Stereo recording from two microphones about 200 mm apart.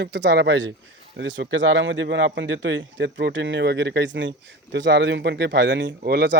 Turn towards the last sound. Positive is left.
turn(degrees=-55)  # may be behind; listen again after turning